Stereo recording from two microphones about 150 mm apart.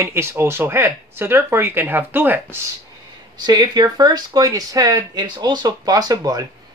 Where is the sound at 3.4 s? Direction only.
30° right (ahead or behind).